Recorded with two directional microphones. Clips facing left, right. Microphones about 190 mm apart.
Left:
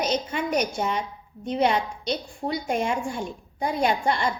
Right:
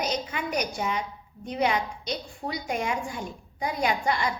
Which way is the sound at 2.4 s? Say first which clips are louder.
Left 5 dB; 25° left (ahead or behind).